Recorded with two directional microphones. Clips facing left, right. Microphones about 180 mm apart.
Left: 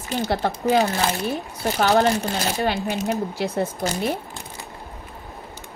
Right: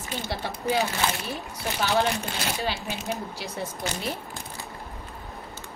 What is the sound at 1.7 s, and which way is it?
A woman's voice, 50° left (ahead or behind).